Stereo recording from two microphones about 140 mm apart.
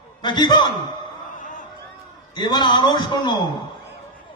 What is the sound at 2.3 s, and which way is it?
A man's voice, 30° left (ahead or behind).